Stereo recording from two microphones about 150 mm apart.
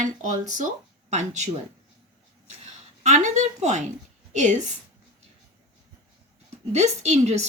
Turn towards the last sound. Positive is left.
turn(degrees=-50)  # may be behind; listen again after turning